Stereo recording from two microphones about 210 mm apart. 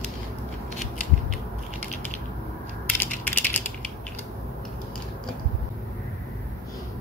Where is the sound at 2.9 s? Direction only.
10° left (ahead or behind).